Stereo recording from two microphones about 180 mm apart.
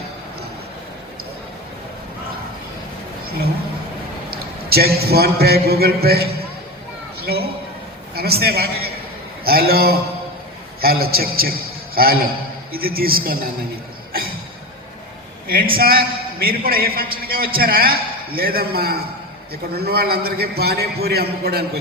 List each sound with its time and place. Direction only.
4.3 s a man's voice: 60° right (ahead or behind)
7.2 s a sound: 60° right (ahead or behind)
8.1 s a man's voice: 60° right (ahead or behind)
15.4 s a woman's voice: 55° right (ahead or behind)